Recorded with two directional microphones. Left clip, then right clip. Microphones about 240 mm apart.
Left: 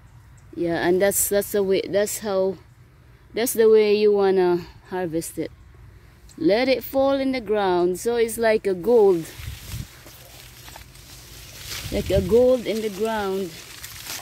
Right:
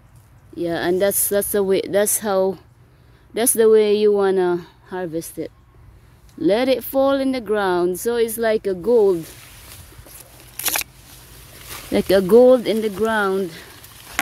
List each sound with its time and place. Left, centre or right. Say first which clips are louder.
0.6 s a woman's voice: right 1 dB; centre
6.4 s a woman's voice: right 2 dB; centre
11.9 s speech: right 6 dB; right